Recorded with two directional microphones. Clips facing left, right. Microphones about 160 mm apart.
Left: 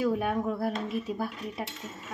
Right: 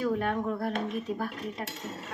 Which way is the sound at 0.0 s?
10° left (ahead or behind).